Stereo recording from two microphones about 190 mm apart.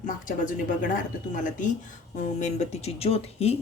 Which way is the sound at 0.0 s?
45° left (ahead or behind).